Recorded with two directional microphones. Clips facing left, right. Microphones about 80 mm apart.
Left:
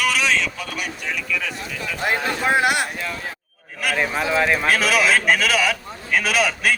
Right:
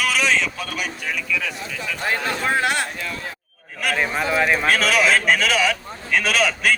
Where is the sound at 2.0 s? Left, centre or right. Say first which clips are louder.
Left 2 dB; centre.